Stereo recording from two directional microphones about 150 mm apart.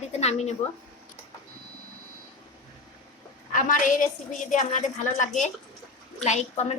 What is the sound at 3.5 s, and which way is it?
A woman's voice, 60° left (ahead or behind).